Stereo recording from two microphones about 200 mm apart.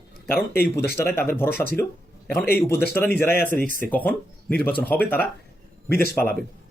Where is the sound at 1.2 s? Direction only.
10° left (ahead or behind).